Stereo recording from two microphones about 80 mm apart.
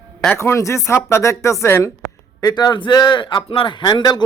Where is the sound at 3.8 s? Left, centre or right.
Left.